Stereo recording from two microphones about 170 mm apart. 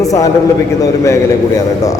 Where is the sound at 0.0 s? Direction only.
20° left (ahead or behind).